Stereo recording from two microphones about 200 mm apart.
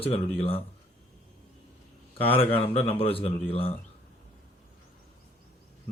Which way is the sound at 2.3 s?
25° left (ahead or behind).